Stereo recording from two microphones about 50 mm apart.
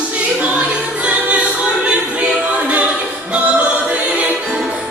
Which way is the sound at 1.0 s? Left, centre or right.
Right.